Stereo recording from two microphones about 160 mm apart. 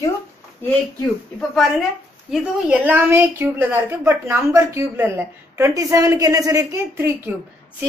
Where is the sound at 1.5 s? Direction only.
Centre (ahead or behind).